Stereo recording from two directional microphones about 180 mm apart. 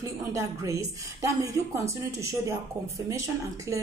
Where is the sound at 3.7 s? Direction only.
15° right (ahead or behind).